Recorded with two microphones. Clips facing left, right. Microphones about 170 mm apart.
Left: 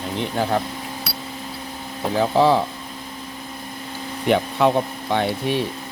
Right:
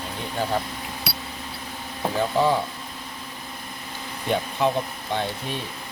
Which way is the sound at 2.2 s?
75° left (ahead or behind).